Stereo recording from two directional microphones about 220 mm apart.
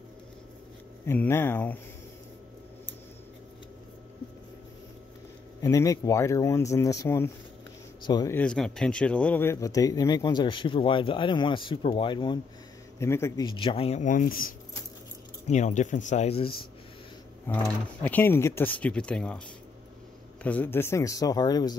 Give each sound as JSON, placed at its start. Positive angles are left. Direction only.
{"t": 1.0, "sound": "speech", "side_deg": 10}
{"t": 5.6, "sound": "speech", "side_deg": 15}
{"t": 8.4, "sound": "speech", "side_deg": 5}
{"t": 17.5, "sound": "speech", "side_deg": 10}
{"t": 20.4, "sound": "speech", "side_deg": 10}